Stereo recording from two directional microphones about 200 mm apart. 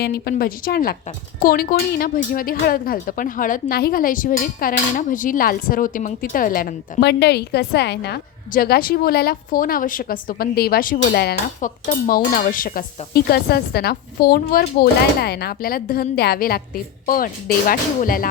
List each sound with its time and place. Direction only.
0.0 s speech: 50° left (ahead or behind)